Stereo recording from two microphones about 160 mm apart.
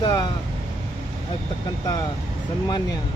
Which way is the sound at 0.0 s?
25° left (ahead or behind).